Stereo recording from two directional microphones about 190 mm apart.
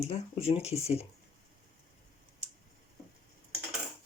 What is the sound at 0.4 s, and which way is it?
Speech, 30° left (ahead or behind).